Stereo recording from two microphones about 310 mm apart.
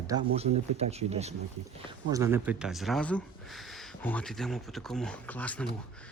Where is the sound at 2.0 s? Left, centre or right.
Centre.